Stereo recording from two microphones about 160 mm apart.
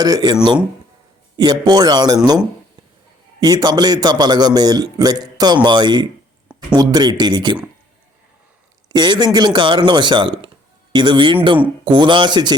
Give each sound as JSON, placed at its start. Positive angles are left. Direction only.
{"t": 0.0, "sound": "a man's voice", "side_deg": -25}
{"t": 1.4, "sound": "a man's voice", "side_deg": -25}
{"t": 3.4, "sound": "a man's voice", "side_deg": -25}
{"t": 8.9, "sound": "a man's voice", "side_deg": -25}